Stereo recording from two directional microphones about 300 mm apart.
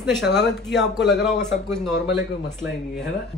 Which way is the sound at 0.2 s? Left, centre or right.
Left.